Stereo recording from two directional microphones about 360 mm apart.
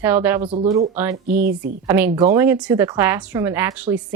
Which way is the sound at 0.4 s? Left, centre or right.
Centre.